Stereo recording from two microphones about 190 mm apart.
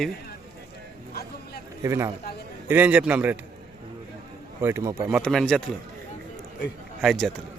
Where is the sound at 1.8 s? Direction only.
15° right (ahead or behind).